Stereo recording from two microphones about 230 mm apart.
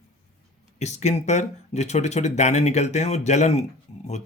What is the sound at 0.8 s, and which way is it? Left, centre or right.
Speech, left.